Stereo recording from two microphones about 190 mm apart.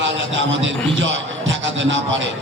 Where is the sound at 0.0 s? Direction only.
75° right (ahead or behind).